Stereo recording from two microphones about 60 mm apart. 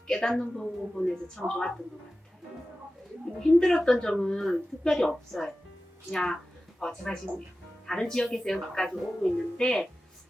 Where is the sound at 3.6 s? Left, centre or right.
Centre.